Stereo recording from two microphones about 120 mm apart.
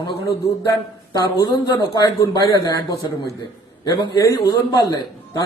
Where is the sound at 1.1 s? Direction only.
35° left (ahead or behind).